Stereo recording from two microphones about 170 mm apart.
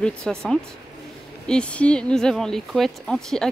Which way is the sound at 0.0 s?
5° left (ahead or behind).